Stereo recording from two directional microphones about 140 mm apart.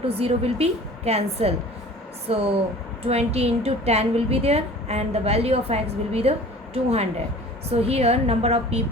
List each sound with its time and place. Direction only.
0.0 s a woman's voice: 45° right (ahead or behind)
7.7 s a woman's voice: 45° right (ahead or behind)